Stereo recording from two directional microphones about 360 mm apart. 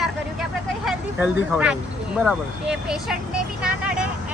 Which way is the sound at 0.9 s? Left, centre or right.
Centre.